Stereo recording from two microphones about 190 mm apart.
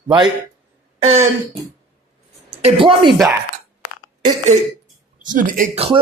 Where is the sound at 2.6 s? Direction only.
30° right (ahead or behind).